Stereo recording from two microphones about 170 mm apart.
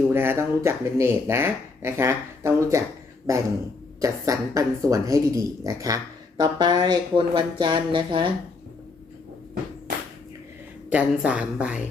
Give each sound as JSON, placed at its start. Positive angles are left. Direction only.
{"t": 0.1, "sound": "speech", "side_deg": -15}
{"t": 10.8, "sound": "speech", "side_deg": -10}